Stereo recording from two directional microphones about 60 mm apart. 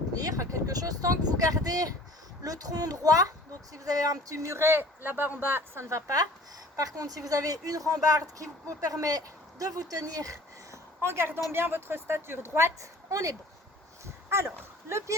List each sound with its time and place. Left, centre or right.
0.1 s speech: right
6.7 s speech: right
11.0 s a woman's voice: right
14.3 s speech: right